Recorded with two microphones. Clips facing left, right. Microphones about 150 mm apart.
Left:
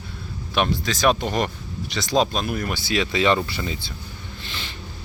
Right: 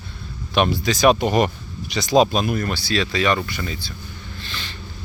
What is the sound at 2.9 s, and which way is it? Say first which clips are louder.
Speech: left 1 dB; 20° left (ahead or behind).